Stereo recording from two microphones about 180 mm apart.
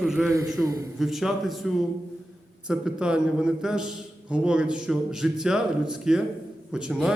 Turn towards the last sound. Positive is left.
turn(degrees=-5)  # may be behind; listen again after turning